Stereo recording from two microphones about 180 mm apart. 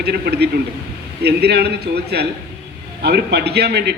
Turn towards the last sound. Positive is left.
turn(degrees=-65)  # may be behind; listen again after turning